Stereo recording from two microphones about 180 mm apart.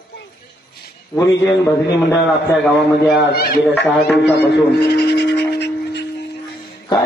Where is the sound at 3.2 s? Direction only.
65° left (ahead or behind).